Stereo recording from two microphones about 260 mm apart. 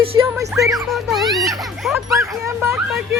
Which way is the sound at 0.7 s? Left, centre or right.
Centre.